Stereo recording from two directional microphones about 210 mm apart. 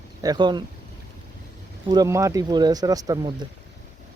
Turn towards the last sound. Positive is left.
turn(degrees=-20)  # may be behind; listen again after turning